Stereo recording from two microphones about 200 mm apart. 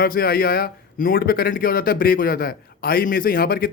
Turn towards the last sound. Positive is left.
turn(degrees=50)  # may be behind; listen again after turning